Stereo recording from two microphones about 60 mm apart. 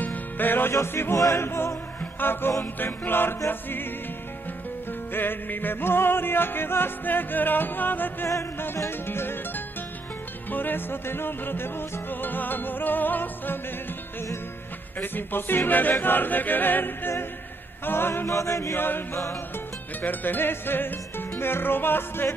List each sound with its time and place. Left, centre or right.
0.0 s music: left
0.7 s music: left
5.1 s music: left
8.7 s music: left
10.5 s music: left
15.0 s music: left
18.3 s music: left
18.8 s music: left